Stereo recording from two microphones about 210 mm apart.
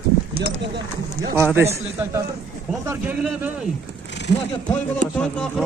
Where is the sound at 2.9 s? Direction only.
10° right (ahead or behind).